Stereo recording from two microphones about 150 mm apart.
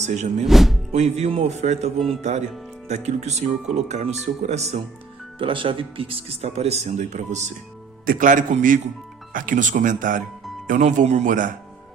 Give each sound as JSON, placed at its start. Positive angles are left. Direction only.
{"t": 0.0, "sound": "speech", "side_deg": -50}
{"t": 0.4, "sound": "speech", "side_deg": 0}
{"t": 0.9, "sound": "speech", "side_deg": -45}
{"t": 5.4, "sound": "speech", "side_deg": -35}
{"t": 8.0, "sound": "speech", "side_deg": -65}